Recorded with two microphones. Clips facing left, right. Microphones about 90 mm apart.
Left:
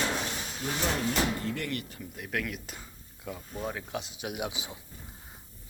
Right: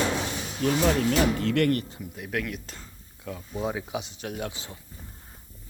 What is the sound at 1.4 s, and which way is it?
Speech, 75° right (ahead or behind).